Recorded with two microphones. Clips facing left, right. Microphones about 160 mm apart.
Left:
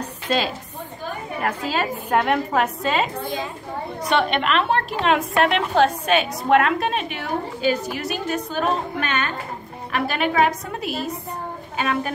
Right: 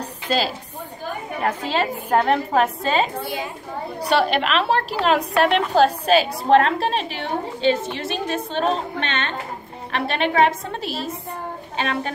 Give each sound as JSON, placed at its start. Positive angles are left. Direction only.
{"t": 1.4, "sound": "a woman's voice", "side_deg": -30}